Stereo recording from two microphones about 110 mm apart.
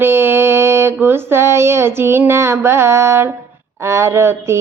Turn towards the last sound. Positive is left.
turn(degrees=-25)  # may be behind; listen again after turning